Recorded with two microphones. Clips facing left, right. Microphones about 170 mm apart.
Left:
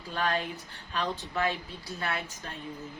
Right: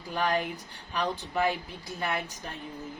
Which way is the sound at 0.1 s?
15° right (ahead or behind).